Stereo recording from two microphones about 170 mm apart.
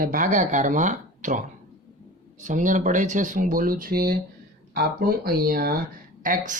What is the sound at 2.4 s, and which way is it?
Speech, 50° right (ahead or behind).